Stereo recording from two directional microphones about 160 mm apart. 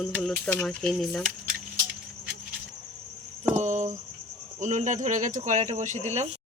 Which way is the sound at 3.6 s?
50° right (ahead or behind).